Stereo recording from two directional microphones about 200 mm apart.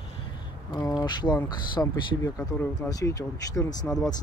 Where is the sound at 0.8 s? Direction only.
20° left (ahead or behind).